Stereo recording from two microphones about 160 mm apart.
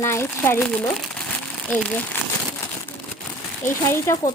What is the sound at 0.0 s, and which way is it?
A woman's voice, 15° left (ahead or behind).